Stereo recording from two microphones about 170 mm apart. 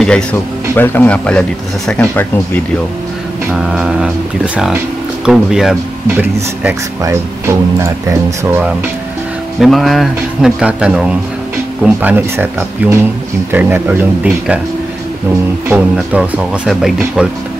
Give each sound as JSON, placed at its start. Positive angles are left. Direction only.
{"t": 0.0, "sound": "speech", "side_deg": 5}
{"t": 3.5, "sound": "speech", "side_deg": -5}
{"t": 5.2, "sound": "speech", "side_deg": -5}
{"t": 7.0, "sound": "speech", "side_deg": -15}
{"t": 9.6, "sound": "speech", "side_deg": 0}
{"t": 15.7, "sound": "speech", "side_deg": -5}